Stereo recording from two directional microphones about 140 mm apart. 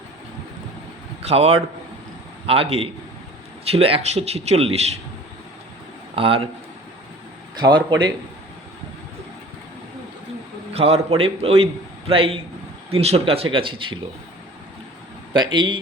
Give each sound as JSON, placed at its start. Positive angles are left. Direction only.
{"t": 1.2, "sound": "a man's voice", "side_deg": -50}
{"t": 6.1, "sound": "speech", "side_deg": -40}
{"t": 7.5, "sound": "speech", "side_deg": -30}
{"t": 10.8, "sound": "a man's voice", "side_deg": -45}
{"t": 15.3, "sound": "speech", "side_deg": -35}